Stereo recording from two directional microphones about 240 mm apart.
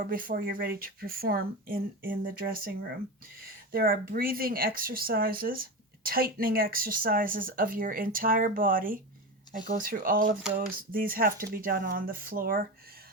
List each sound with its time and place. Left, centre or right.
0.0 s speech: right